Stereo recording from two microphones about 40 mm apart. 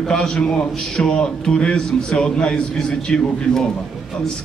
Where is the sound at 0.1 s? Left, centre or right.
Centre.